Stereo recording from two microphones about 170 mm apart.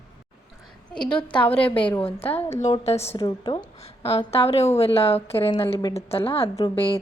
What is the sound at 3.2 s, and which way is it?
Speech, 25° left (ahead or behind).